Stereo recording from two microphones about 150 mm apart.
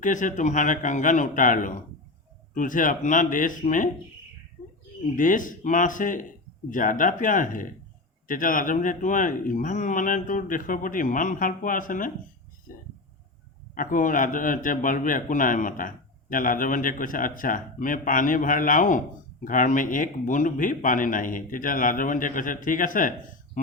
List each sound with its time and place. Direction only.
0.0 s speech: 60° left (ahead or behind)
5.1 s speech: 60° left (ahead or behind)
13.7 s speech: 60° left (ahead or behind)